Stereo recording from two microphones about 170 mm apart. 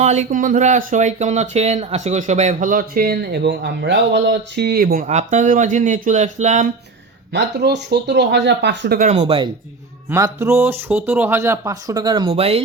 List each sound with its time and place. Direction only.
0.0 s speech: 45° right (ahead or behind); by 5.0 s 60° right (ahead or behind)
5.0 s speech: 45° right (ahead or behind)
7.3 s speech: 85° right
9.0 s speech: 40° right (ahead or behind)
10.1 s speech: 15° right (ahead or behind); by 12.6 s 35° right (ahead or behind)